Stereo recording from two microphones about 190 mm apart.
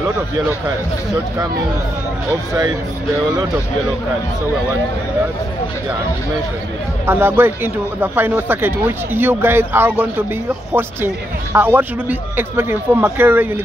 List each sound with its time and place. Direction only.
7.1 s speech: 10° right (ahead or behind)